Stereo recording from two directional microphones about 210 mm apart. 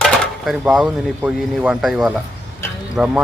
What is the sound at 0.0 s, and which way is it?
Speech, 5° right (ahead or behind).